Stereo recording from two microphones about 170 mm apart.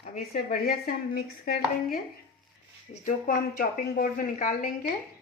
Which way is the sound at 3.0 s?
55° left (ahead or behind).